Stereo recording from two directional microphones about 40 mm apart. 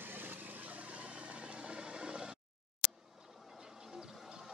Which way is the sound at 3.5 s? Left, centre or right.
Centre.